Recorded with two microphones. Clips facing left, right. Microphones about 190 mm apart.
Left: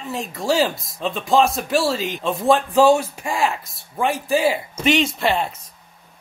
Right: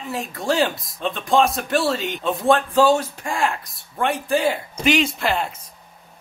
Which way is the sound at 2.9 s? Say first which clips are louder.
Left 2 dB; 15° left (ahead or behind).